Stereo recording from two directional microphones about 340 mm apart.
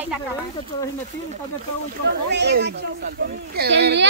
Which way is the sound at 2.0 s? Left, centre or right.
Right.